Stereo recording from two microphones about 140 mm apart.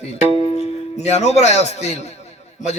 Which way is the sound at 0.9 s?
50° left (ahead or behind).